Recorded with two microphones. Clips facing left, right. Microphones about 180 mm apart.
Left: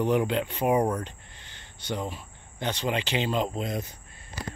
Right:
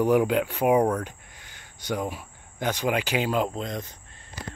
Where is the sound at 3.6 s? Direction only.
5° left (ahead or behind).